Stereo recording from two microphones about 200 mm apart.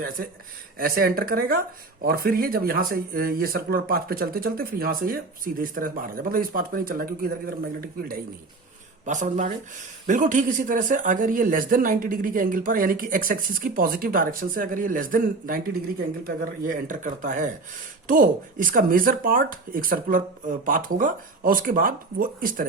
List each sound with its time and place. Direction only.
0.8 s speech: 45° right (ahead or behind)